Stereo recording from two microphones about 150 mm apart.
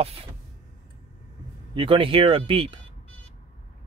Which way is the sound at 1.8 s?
35° right (ahead or behind).